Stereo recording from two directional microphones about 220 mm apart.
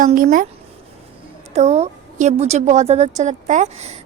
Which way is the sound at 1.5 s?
30° right (ahead or behind).